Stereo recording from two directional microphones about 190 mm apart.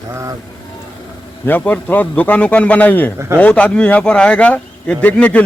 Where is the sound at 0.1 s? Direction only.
15° right (ahead or behind).